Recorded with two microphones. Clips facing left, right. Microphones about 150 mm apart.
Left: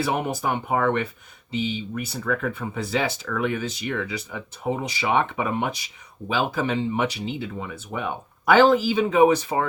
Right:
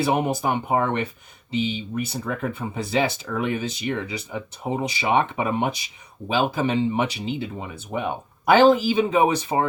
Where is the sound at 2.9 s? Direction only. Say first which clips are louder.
Right 3 dB; 20° right (ahead or behind).